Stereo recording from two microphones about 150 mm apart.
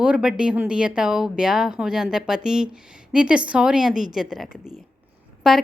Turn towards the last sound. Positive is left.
turn(degrees=-5)  # may be behind; listen again after turning